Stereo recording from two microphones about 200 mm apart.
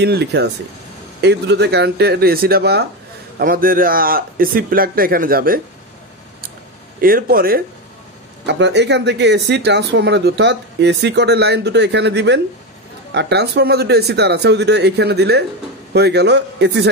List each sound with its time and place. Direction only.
0.0 s a man's voice: 55° right (ahead or behind)
7.0 s a man's voice: 45° right (ahead or behind)
8.5 s speech: 60° right (ahead or behind)